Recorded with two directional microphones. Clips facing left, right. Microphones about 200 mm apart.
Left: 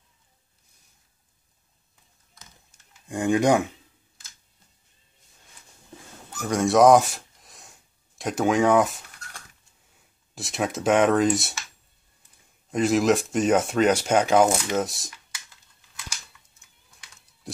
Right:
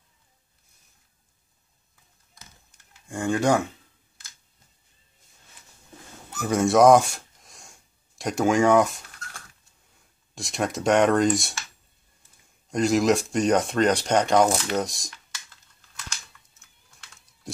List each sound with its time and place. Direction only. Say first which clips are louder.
3.1 s speech: left 2 dB; 20° left (ahead or behind)
6.4 s speech: even; centre (ahead or behind)
10.3 s speech: even; 5° left (ahead or behind)
12.7 s speech: even; centre (ahead or behind)